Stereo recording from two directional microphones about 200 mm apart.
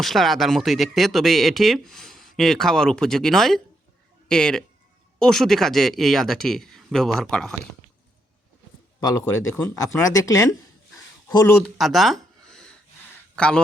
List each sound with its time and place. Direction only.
0.0 s speech: centre (ahead or behind)
9.0 s speech: 15° left (ahead or behind)
11.5 s speech: centre (ahead or behind)